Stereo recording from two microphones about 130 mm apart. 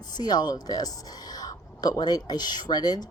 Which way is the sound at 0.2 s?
30° left (ahead or behind).